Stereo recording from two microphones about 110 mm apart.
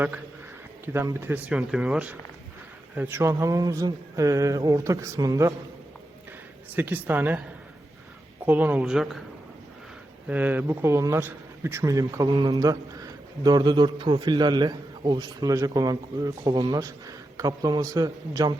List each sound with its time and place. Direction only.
0.9 s speech: 20° right (ahead or behind)
1.5 s speech: 10° right (ahead or behind)
3.3 s speech: 30° right (ahead or behind)
6.7 s speech: 15° right (ahead or behind)
8.4 s speech: 15° right (ahead or behind)
10.2 s speech: 15° right (ahead or behind); by 18.5 s 35° right (ahead or behind)